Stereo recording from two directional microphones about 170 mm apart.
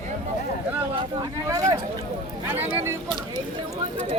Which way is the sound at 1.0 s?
20° right (ahead or behind).